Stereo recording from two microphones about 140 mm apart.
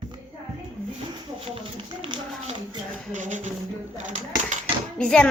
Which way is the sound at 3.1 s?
60° right (ahead or behind).